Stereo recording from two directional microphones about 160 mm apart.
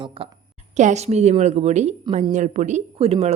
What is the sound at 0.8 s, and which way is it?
A woman's voice, 45° right (ahead or behind).